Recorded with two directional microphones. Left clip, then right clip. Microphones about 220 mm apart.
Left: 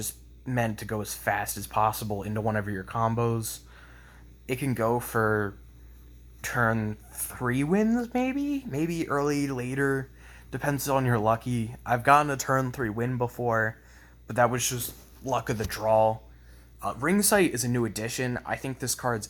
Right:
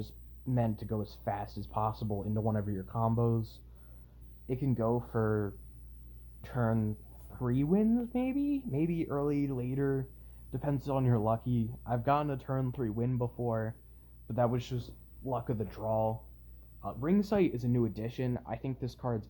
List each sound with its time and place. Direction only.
0.0 s speech: 5° left (ahead or behind)
4.4 s speech: 10° left (ahead or behind)
6.4 s speech: 10° left (ahead or behind)
7.3 s speech: 20° left (ahead or behind)
7.5 s speech: 10° left (ahead or behind)